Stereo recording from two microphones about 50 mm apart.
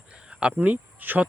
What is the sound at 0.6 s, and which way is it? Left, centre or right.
Speech, right.